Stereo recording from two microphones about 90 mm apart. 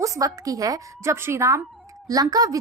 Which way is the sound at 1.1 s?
30° right (ahead or behind).